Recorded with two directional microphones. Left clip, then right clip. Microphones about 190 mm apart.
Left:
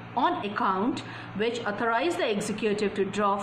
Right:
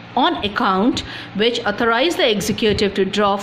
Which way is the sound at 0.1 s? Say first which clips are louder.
Right 9 dB; 50° right (ahead or behind).